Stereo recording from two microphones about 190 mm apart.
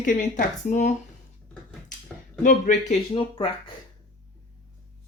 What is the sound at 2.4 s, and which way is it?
Speech, 40° left (ahead or behind).